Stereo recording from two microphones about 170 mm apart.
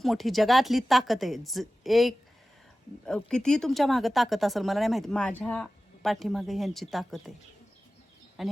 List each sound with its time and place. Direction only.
0.0 s speech: centre (ahead or behind)
8.4 s speech: centre (ahead or behind)